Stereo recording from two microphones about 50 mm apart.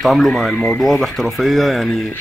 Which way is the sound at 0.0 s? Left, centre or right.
Centre.